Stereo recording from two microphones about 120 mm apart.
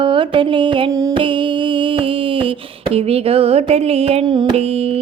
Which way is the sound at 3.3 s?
55° right (ahead or behind).